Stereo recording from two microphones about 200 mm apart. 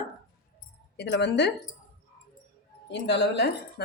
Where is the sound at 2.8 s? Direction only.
60° left (ahead or behind).